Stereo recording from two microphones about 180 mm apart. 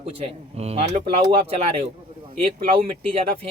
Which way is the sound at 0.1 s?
35° right (ahead or behind).